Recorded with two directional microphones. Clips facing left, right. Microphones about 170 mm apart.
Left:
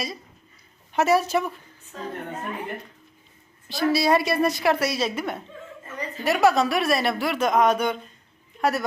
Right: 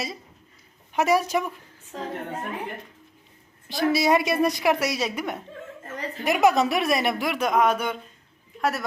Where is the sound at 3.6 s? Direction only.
20° right (ahead or behind).